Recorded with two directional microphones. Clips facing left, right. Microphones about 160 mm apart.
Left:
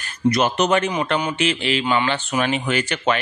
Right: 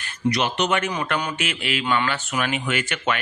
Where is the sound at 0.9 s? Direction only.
25° left (ahead or behind).